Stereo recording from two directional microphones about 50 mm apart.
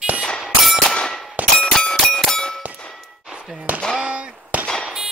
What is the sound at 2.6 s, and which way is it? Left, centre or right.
Clang, right.